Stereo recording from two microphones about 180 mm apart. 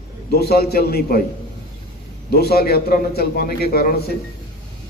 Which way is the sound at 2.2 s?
60° left (ahead or behind).